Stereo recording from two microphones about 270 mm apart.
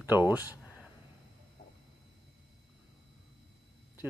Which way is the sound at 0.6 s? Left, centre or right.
Centre.